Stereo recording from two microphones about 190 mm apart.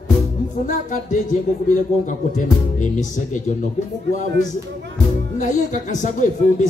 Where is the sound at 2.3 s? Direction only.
40° left (ahead or behind).